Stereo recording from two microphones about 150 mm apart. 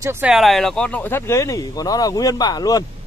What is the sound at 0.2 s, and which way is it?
A man's voice, centre (ahead or behind).